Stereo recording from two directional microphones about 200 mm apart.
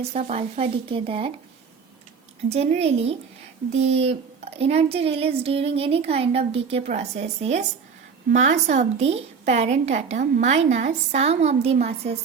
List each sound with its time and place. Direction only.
0.0 s speech: 30° right (ahead or behind)
2.5 s speech: 30° right (ahead or behind)